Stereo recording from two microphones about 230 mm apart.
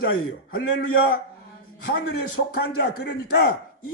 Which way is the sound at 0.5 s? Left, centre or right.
Left.